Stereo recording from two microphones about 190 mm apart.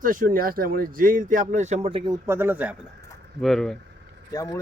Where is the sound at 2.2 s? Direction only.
10° right (ahead or behind).